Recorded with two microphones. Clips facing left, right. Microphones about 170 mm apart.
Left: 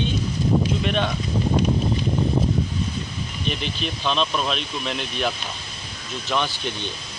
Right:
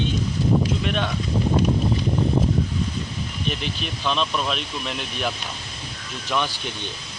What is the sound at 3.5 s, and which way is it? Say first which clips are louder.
Speech: left 2 dB; 5° right (ahead or behind).